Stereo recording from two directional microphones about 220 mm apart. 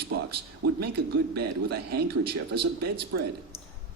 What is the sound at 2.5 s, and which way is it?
Speech, 90° right.